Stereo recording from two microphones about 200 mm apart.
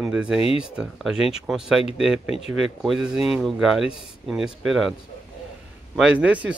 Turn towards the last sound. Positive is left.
turn(degrees=-5)  # may be behind; listen again after turning